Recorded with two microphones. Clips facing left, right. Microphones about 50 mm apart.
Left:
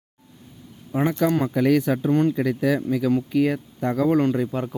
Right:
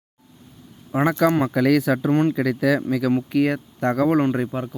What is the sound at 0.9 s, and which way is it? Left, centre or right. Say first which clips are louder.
Speech: right 3 dB; right.